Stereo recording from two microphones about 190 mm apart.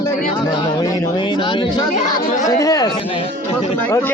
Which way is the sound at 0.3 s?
25° left (ahead or behind).